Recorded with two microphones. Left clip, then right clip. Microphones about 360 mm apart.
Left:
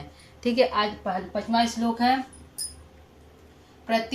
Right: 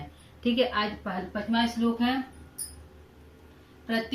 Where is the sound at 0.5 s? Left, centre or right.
Centre.